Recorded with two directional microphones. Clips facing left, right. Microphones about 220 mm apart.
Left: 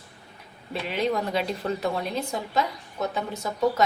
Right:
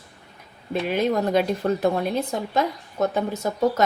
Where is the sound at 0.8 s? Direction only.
50° right (ahead or behind).